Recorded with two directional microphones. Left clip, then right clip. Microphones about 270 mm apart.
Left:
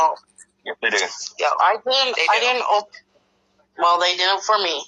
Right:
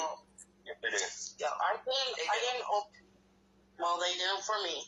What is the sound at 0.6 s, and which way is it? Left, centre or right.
Speech, left.